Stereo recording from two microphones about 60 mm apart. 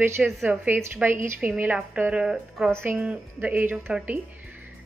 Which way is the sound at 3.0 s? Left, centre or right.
Right.